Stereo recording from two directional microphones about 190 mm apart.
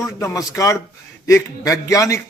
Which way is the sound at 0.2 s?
15° left (ahead or behind).